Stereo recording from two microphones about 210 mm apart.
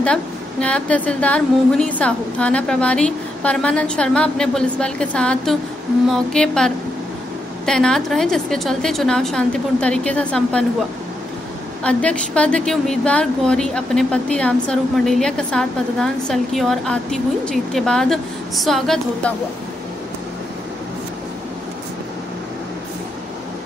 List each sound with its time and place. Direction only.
0.0 s a woman's voice: 5° left (ahead or behind)
11.8 s a woman's voice: 5° left (ahead or behind)